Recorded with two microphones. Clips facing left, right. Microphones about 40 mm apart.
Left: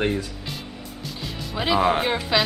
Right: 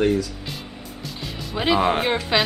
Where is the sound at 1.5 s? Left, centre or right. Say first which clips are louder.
Right 1 dB; centre.